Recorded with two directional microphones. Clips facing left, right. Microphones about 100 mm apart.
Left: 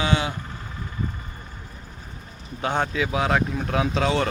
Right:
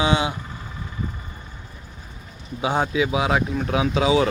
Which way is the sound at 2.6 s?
5° right (ahead or behind).